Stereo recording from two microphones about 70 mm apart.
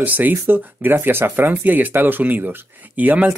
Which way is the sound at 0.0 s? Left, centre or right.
Right.